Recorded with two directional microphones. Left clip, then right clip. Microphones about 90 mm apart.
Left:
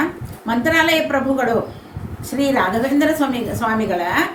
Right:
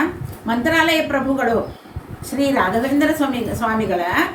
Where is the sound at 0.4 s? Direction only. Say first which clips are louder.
Left 1 dB; 35° left (ahead or behind).